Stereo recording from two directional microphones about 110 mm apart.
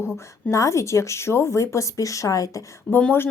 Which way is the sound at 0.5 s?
25° left (ahead or behind).